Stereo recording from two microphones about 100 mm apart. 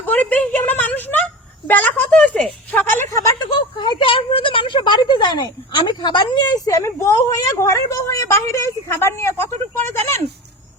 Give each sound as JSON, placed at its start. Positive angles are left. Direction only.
{"t": 0.0, "sound": "a woman's voice", "side_deg": 15}
{"t": 3.1, "sound": "speech", "side_deg": 30}
{"t": 3.3, "sound": "a woman's voice", "side_deg": 50}
{"t": 6.7, "sound": "a woman's voice", "side_deg": 30}